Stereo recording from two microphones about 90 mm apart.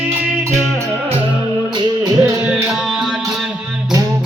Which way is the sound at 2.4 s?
10° right (ahead or behind).